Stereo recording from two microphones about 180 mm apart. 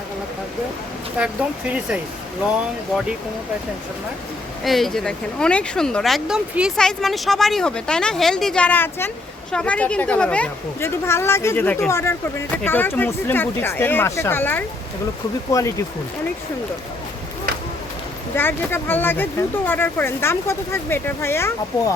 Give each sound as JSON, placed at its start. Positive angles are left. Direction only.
{"t": 1.2, "sound": "speech", "side_deg": -5}
{"t": 4.6, "sound": "speech", "side_deg": 0}
{"t": 18.3, "sound": "speech", "side_deg": 10}